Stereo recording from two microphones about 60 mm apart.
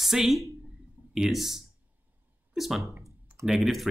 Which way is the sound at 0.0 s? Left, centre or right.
Centre.